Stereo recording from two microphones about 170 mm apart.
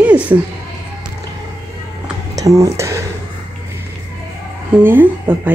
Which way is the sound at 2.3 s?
20° right (ahead or behind).